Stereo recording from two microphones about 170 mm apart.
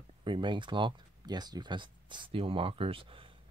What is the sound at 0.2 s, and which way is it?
Speech, 30° right (ahead or behind).